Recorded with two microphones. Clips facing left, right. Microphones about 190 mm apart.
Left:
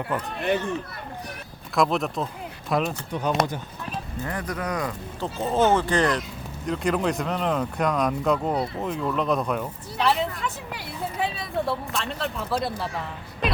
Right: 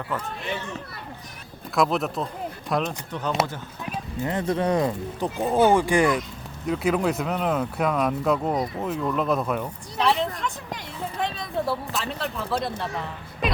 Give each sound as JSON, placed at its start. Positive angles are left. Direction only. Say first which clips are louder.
{"t": 0.3, "sound": "speech", "louder": "left 7 dB", "side_deg": 55}
{"t": 1.7, "sound": "speech", "louder": "even", "side_deg": 0}
{"t": 3.1, "sound": "speech", "louder": "left 2 dB", "side_deg": 15}
{"t": 4.2, "sound": "speech", "louder": "right 7 dB", "side_deg": -25}
{"t": 5.4, "sound": "speech", "louder": "right 2 dB", "side_deg": -10}
{"t": 13.4, "sound": "a sound", "louder": "even", "side_deg": 0}